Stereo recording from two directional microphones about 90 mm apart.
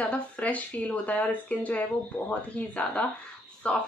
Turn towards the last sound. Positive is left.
turn(degrees=15)  # may be behind; listen again after turning